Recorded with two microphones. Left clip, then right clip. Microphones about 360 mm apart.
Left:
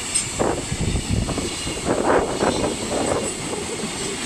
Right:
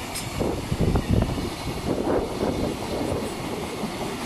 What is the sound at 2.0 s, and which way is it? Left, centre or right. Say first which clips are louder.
Vehicle: left 7 dB; left.